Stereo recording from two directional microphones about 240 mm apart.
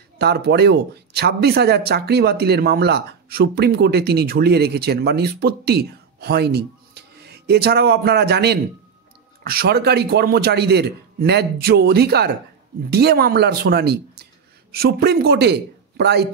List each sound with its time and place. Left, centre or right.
0.2 s speech: right